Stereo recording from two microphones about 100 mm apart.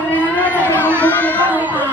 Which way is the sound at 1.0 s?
15° left (ahead or behind).